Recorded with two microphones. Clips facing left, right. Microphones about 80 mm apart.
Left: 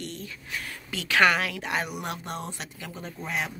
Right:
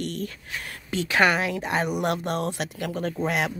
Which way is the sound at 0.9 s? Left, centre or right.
Right.